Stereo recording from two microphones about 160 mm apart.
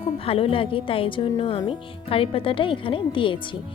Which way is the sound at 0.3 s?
35° left (ahead or behind).